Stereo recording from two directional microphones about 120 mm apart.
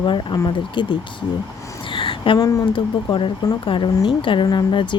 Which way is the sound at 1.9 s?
45° left (ahead or behind).